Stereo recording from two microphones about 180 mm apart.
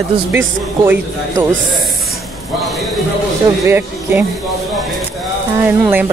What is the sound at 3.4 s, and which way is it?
Speech, 15° right (ahead or behind).